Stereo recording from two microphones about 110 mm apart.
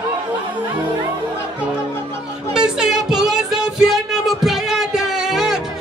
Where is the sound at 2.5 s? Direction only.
5° right (ahead or behind).